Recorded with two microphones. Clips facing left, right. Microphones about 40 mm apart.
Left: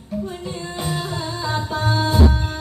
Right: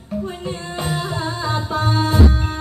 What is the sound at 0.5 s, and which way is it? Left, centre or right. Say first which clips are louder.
Music: right 3 dB; right.